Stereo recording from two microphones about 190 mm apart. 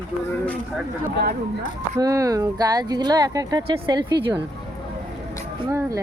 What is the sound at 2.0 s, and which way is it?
Speech, 15° right (ahead or behind).